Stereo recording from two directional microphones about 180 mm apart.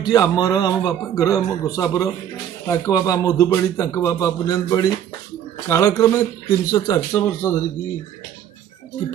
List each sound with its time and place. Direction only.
0.0 s a man's voice: 20° left (ahead or behind)